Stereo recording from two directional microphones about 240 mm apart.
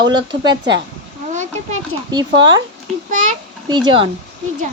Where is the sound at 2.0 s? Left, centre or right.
Centre.